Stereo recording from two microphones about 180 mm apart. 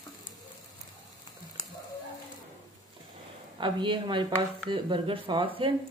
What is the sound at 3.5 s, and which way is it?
Speech, 25° right (ahead or behind).